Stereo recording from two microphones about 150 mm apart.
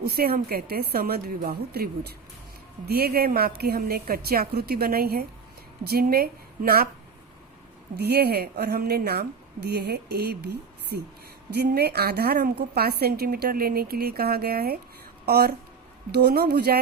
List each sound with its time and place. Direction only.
0.0 s a woman's voice: 90° right
7.9 s a woman's voice: 90° right